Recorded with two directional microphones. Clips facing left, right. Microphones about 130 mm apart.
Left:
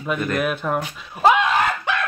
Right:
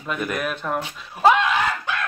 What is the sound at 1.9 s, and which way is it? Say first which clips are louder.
Chicken: left 4 dB; 70° left (ahead or behind).